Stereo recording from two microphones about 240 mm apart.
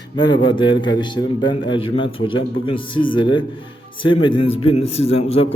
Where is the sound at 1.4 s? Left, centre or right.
Left.